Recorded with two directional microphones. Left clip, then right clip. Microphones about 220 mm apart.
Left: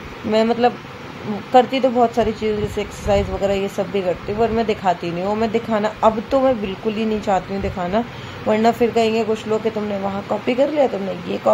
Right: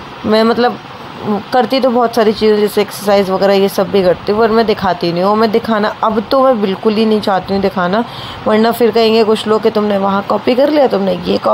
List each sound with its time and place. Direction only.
0.3 s speech: 20° right (ahead or behind)